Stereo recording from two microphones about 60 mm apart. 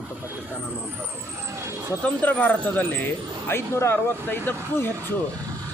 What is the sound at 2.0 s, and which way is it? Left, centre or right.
Speech, left.